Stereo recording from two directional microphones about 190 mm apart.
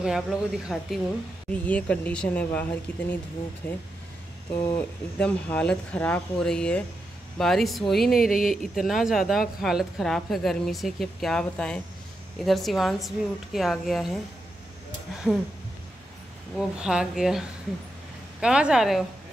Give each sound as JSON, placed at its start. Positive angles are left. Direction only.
{"t": 0.0, "sound": "speech", "side_deg": 0}
{"t": 4.6, "sound": "speech", "side_deg": 20}
{"t": 5.2, "sound": "speech", "side_deg": 5}
{"t": 8.3, "sound": "speech", "side_deg": 45}
{"t": 8.7, "sound": "speech", "side_deg": 0}
{"t": 16.5, "sound": "speech", "side_deg": -5}